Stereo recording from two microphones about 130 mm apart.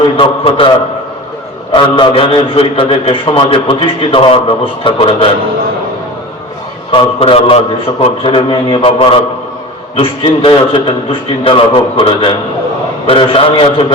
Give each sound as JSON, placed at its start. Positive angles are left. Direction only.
{"t": 0.2, "sound": "a man's voice", "side_deg": 45}
{"t": 1.7, "sound": "a man's voice", "side_deg": 40}
{"t": 6.9, "sound": "a man's voice", "side_deg": 45}